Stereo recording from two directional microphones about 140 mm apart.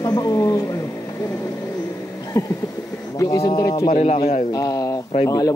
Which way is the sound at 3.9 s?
50° left (ahead or behind).